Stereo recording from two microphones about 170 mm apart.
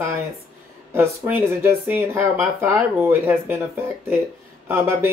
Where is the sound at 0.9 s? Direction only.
15° right (ahead or behind).